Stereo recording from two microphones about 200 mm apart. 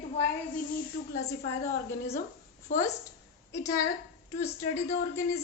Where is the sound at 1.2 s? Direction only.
35° left (ahead or behind).